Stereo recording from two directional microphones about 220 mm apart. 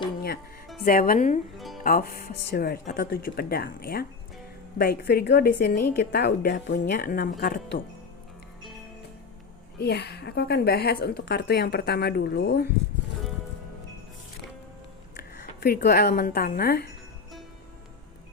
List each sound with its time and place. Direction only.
0.9 s speech: 40° left (ahead or behind)
1.5 s music: centre (ahead or behind)
1.8 s a woman's voice: 40° left (ahead or behind)
9.7 s a woman's voice: 50° left (ahead or behind)
15.6 s a woman's voice: 45° left (ahead or behind)